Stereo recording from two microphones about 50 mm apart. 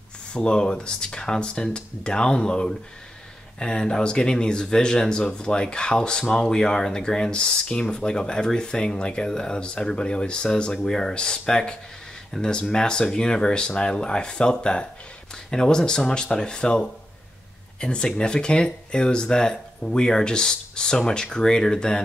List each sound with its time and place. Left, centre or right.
0.3 s speech: centre